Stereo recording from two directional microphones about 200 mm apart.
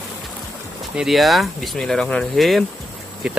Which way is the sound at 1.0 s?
Centre (ahead or behind).